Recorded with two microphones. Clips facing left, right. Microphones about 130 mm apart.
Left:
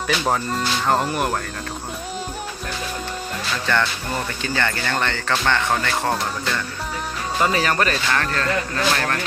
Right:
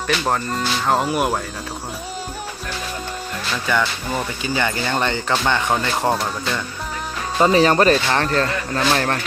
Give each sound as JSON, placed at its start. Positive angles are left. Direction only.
{"t": 0.1, "sound": "speech", "side_deg": 0}
{"t": 3.7, "sound": "speech", "side_deg": -5}
{"t": 7.3, "sound": "speech", "side_deg": -25}